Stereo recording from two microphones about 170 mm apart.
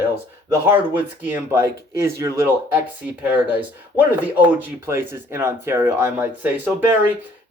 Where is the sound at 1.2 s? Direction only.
15° right (ahead or behind).